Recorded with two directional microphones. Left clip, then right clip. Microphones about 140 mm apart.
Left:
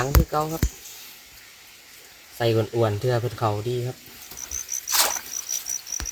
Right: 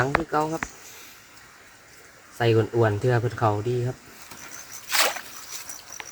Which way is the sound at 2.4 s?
15° left (ahead or behind).